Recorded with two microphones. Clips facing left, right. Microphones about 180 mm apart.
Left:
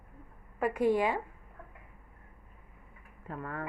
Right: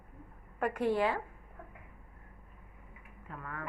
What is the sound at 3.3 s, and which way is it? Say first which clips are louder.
Speech: left 5 dB; 35° left (ahead or behind).